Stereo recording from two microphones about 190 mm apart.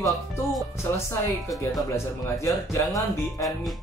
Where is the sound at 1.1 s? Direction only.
15° left (ahead or behind).